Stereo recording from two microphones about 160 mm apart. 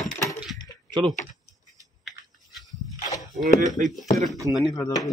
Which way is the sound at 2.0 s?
Centre (ahead or behind).